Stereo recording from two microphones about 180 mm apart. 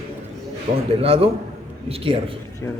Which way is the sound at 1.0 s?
30° right (ahead or behind).